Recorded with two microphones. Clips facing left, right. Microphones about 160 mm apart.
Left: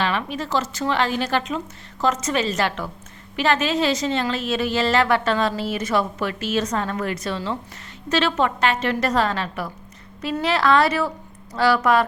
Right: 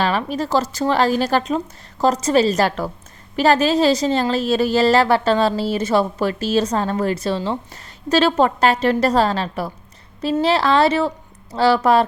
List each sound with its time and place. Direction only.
0.0 s a woman's voice: 35° right (ahead or behind)